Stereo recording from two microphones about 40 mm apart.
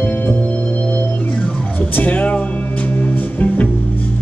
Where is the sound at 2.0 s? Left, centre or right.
Left.